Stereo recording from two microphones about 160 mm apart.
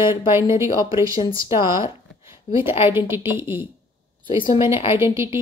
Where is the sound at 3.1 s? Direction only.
15° right (ahead or behind).